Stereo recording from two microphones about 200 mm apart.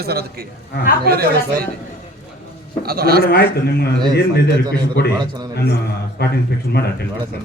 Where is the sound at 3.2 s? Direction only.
50° left (ahead or behind).